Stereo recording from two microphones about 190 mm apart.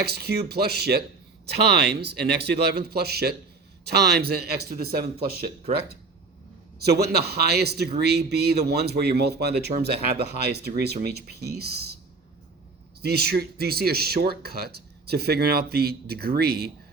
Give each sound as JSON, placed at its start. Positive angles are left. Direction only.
{"t": 0.0, "sound": "speech", "side_deg": -55}
{"t": 6.8, "sound": "speech", "side_deg": -60}
{"t": 13.0, "sound": "speech", "side_deg": -55}